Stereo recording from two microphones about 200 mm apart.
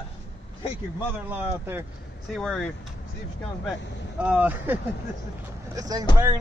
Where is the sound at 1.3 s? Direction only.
10° right (ahead or behind).